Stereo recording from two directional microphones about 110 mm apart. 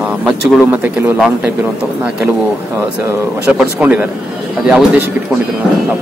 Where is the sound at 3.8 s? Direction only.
15° right (ahead or behind).